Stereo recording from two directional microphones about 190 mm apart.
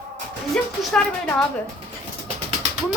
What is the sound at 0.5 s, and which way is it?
Speech, centre (ahead or behind).